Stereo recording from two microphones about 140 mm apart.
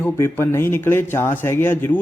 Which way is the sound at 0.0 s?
15° left (ahead or behind).